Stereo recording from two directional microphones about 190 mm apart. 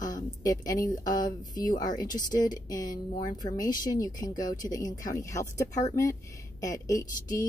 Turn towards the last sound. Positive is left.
turn(degrees=20)  # may be behind; listen again after turning